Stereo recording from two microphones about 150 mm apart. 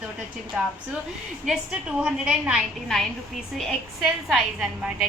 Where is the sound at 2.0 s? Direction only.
5° right (ahead or behind).